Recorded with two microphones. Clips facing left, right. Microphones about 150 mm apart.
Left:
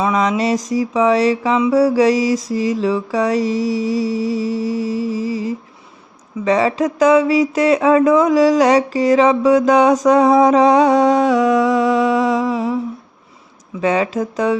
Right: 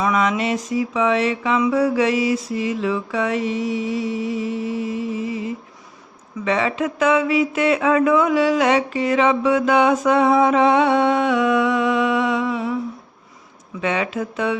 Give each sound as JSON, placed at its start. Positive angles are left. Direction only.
{"t": 0.0, "sound": "speech", "side_deg": 30}
{"t": 13.8, "sound": "speech", "side_deg": 35}